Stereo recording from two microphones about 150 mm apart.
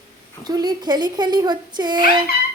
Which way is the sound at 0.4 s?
25° right (ahead or behind).